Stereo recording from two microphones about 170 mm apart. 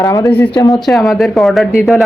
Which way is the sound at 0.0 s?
20° left (ahead or behind).